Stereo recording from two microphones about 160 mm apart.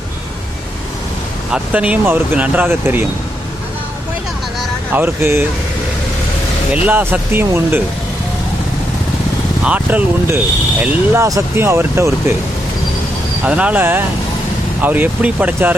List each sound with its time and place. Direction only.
1.5 s speech: 5° right (ahead or behind)
4.9 s speech: 15° right (ahead or behind)
6.8 s speech: 10° right (ahead or behind)
9.6 s speech: 10° right (ahead or behind)
13.4 s speech: 5° right (ahead or behind)